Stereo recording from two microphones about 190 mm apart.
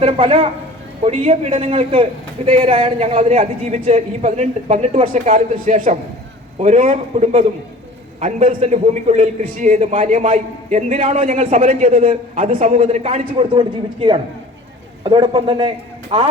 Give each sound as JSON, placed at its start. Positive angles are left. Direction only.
{"t": 0.0, "sound": "a man's voice", "side_deg": -30}